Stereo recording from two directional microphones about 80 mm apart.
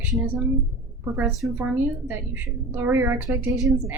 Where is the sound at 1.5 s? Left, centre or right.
Right.